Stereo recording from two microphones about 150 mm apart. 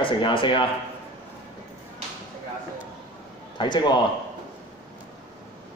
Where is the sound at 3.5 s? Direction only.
30° left (ahead or behind).